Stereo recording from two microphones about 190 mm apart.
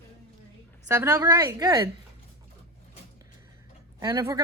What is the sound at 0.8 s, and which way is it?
Speech, 15° right (ahead or behind).